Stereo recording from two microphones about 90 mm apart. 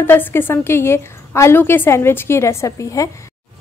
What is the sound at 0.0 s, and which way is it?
A woman's voice, 25° left (ahead or behind).